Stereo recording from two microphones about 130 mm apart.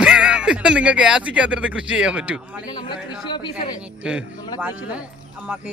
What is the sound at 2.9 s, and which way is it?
Speech, 35° left (ahead or behind).